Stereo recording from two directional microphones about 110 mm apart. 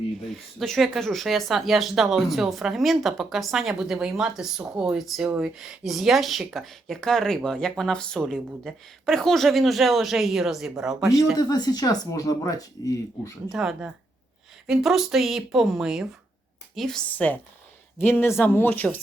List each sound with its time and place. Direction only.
0.6 s speech: centre (ahead or behind)
11.3 s speech: 40° left (ahead or behind)
13.5 s a woman's voice: 5° right (ahead or behind); by 18.9 s 15° left (ahead or behind)